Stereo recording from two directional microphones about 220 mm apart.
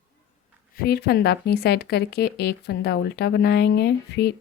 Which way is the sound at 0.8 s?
45° left (ahead or behind).